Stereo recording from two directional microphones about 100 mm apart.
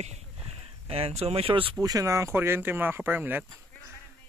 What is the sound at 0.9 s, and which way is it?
Speech, 85° right.